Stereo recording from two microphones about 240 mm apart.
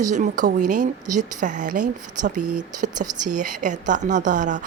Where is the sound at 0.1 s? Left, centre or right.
Right.